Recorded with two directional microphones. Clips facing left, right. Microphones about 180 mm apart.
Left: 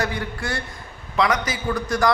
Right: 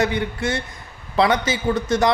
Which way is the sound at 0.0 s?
20° right (ahead or behind).